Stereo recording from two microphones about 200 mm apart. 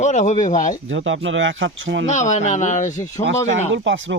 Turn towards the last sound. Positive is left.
turn(degrees=-70)  # may be behind; listen again after turning